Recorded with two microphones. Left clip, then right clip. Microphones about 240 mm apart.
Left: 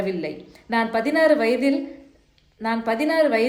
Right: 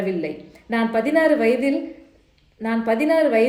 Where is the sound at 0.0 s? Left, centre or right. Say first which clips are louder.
Right 2 dB; centre.